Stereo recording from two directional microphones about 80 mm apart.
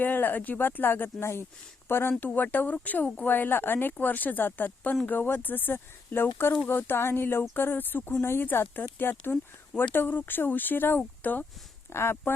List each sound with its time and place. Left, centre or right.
0.0 s speech: left
11.9 s speech: left